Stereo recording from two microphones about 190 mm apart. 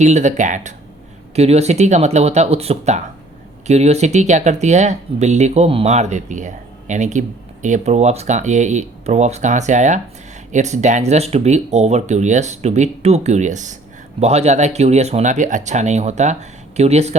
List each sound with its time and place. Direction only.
0.0 s speech: 40° right (ahead or behind)